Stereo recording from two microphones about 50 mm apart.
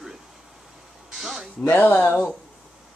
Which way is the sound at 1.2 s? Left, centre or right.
Centre.